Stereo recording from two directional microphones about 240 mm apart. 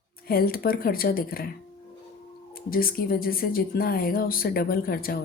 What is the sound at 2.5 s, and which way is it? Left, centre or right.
Speech, left.